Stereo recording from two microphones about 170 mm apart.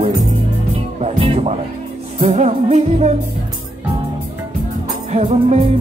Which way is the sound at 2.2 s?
40° right (ahead or behind).